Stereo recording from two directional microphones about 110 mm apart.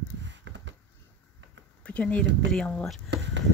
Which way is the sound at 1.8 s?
10° left (ahead or behind).